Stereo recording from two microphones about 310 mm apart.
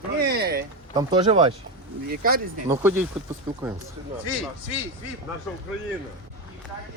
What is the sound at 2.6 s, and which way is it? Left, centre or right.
Speech, centre.